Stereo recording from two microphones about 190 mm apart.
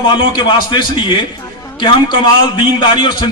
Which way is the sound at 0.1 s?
25° left (ahead or behind).